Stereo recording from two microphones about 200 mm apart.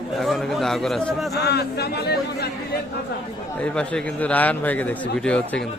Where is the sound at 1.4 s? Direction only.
55° left (ahead or behind).